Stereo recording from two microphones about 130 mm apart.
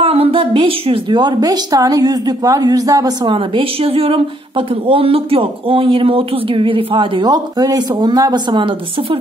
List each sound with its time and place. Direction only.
0.0 s a woman's voice: 45° right (ahead or behind)